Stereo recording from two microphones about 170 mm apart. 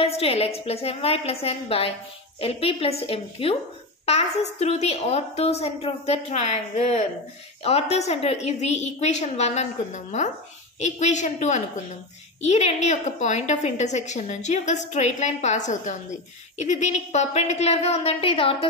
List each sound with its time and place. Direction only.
0.0 s a woman's voice: 35° left (ahead or behind)